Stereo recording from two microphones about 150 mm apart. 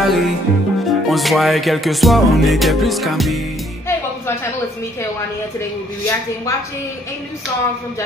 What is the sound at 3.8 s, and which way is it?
Music, 15° left (ahead or behind).